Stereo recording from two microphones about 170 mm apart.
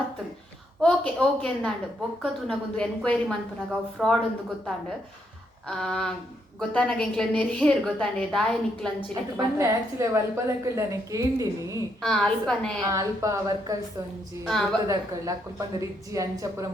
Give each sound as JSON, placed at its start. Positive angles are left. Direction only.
{"t": 0.8, "sound": "a woman's voice", "side_deg": 5}
{"t": 5.6, "sound": "a woman's voice", "side_deg": 0}
{"t": 9.6, "sound": "a woman's voice", "side_deg": -15}
{"t": 12.0, "sound": "a woman's voice", "side_deg": 5}
{"t": 12.8, "sound": "a woman's voice", "side_deg": -20}
{"t": 14.4, "sound": "a woman's voice", "side_deg": 5}
{"t": 14.8, "sound": "a woman's voice", "side_deg": -20}